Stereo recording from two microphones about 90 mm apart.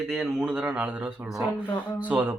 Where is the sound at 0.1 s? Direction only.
5° right (ahead or behind).